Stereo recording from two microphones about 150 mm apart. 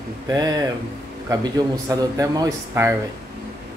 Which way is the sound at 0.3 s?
25° right (ahead or behind).